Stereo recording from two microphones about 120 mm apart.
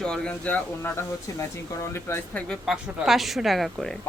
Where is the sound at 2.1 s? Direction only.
20° left (ahead or behind).